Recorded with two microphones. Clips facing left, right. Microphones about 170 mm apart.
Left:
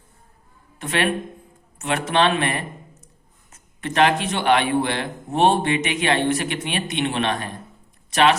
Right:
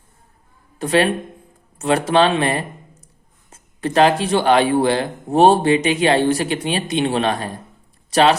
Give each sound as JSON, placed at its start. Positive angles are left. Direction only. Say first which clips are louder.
{"t": 0.8, "sound": "a man's voice", "louder": "right 6 dB", "side_deg": -35}